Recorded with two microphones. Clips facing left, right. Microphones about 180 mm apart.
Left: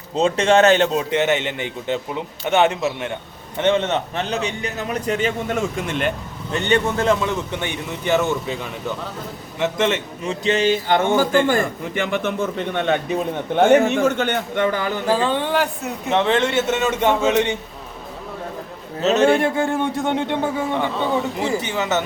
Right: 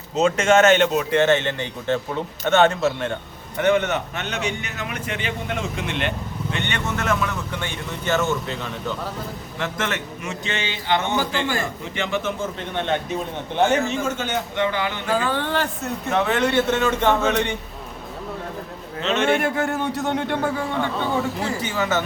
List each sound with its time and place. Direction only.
0.2 s a man's voice: 35° left (ahead or behind)
1.1 s a man's voice: 15° left (ahead or behind)
3.6 s a man's voice: 25° left (ahead or behind)
10.4 s a man's voice: 40° left (ahead or behind)
15.4 s a man's voice: 15° left (ahead or behind)
16.0 s a man's voice: 25° left (ahead or behind)
19.0 s a man's voice: 35° left (ahead or behind); by 22.0 s 20° left (ahead or behind)